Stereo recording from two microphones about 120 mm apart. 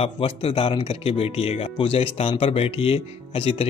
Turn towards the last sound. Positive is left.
turn(degrees=55)  # may be behind; listen again after turning